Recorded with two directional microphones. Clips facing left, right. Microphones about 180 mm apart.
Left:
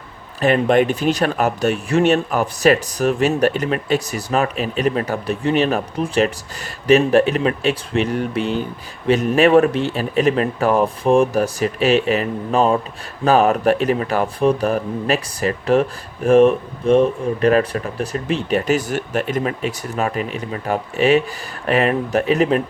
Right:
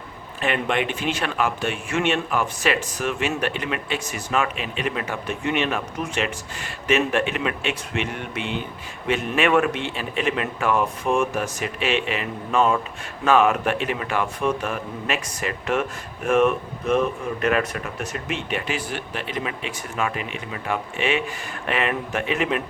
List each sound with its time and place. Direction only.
0.4 s speech: 40° left (ahead or behind)